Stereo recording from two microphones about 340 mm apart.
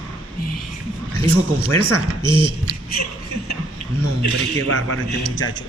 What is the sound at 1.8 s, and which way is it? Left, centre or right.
Speech, centre.